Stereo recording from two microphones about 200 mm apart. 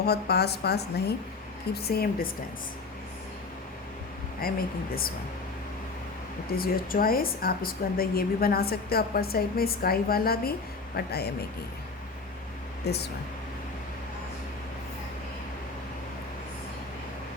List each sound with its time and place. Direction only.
0.0 s a woman's voice: 50° left (ahead or behind)
4.4 s a woman's voice: 50° left (ahead or behind)
6.5 s a woman's voice: 45° left (ahead or behind)
12.8 s speech: 55° left (ahead or behind)